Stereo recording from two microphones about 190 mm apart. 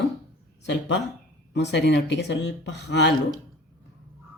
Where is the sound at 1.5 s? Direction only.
65° left (ahead or behind).